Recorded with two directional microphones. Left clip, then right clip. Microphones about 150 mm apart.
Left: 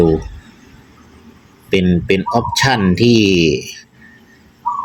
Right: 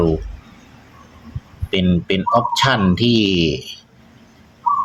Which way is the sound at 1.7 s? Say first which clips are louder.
Left 5 dB; 15° left (ahead or behind).